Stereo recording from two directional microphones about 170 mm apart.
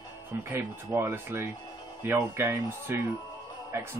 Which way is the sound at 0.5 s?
15° right (ahead or behind).